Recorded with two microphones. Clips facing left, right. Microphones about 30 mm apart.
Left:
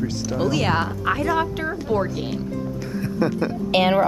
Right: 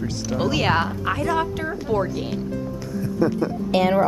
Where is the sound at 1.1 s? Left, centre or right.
Centre.